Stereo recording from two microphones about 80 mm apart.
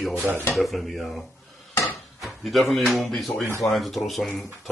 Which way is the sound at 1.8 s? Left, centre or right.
Centre.